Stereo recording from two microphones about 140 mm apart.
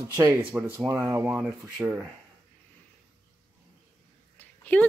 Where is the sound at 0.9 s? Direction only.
25° right (ahead or behind).